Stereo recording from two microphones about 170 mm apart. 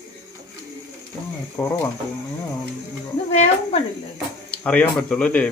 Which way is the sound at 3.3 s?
40° left (ahead or behind).